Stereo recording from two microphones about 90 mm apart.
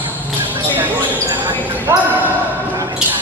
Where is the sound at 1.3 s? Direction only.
30° right (ahead or behind).